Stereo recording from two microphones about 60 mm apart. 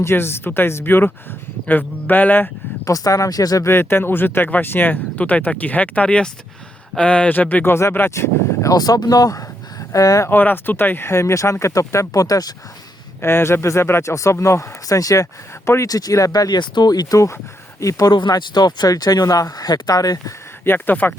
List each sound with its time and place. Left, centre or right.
0.0 s speech: left
2.8 s speech: left
3.6 s speech: left
7.6 s speech: left
8.1 s a sound: left
8.7 s speech: left
9.9 s speech: left
10.2 s speech: left
13.2 s speech: left
15.9 s speech: left
18.6 s speech: left
20.7 s speech: left